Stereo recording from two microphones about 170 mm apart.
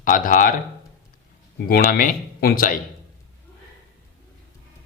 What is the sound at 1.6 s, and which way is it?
Speech, 55° left (ahead or behind).